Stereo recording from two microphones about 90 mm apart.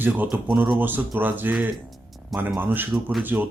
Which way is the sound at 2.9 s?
5° right (ahead or behind).